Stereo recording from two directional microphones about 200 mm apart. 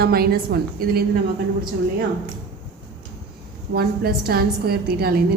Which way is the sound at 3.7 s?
50° right (ahead or behind).